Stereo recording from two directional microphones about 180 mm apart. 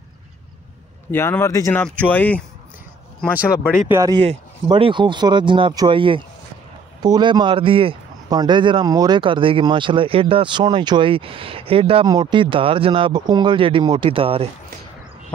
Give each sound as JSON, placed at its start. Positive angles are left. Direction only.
{"t": 1.1, "sound": "speech", "side_deg": 15}
{"t": 3.5, "sound": "speech", "side_deg": 10}
{"t": 3.9, "sound": "speech", "side_deg": -20}
{"t": 4.2, "sound": "speech", "side_deg": -30}